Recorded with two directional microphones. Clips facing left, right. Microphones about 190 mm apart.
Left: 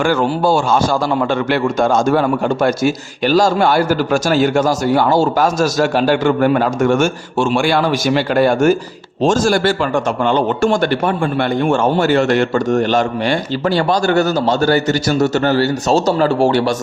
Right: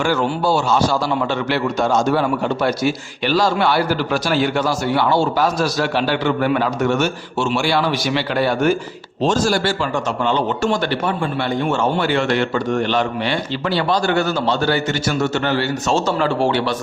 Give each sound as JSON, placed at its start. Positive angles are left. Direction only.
{"t": 0.0, "sound": "a man's voice", "side_deg": 50}